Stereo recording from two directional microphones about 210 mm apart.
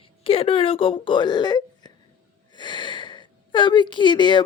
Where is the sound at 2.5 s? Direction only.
20° left (ahead or behind).